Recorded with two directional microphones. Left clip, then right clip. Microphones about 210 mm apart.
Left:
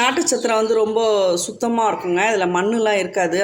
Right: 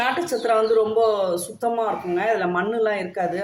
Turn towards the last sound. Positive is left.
turn(degrees=40)  # may be behind; listen again after turning